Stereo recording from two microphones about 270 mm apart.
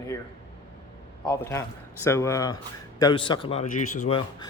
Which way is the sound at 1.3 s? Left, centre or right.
Centre.